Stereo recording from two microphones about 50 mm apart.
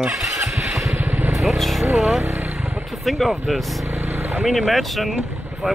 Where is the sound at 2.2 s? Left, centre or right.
Right.